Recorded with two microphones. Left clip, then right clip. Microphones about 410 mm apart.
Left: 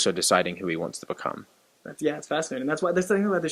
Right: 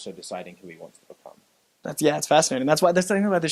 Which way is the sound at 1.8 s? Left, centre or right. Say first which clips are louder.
Right 6 dB; right.